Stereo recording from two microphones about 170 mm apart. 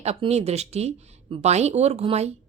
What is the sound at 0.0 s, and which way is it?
Speech, 40° right (ahead or behind).